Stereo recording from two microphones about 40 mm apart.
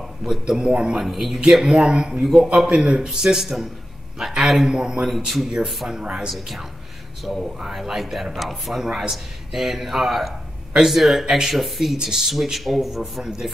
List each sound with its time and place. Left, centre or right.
0.2 s speech: centre
0.6 s a man's voice: right
0.9 s speech: centre
1.5 s a man's voice: centre
4.7 s a man's voice: centre
5.1 s speech: centre
7.3 s speech: centre